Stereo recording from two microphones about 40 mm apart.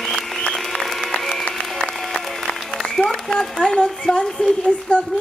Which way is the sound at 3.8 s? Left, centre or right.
Centre.